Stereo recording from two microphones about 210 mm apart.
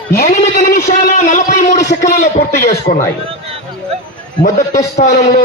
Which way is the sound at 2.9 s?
45° left (ahead or behind).